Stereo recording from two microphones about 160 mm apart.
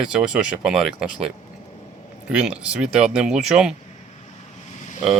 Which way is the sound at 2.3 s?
5° right (ahead or behind).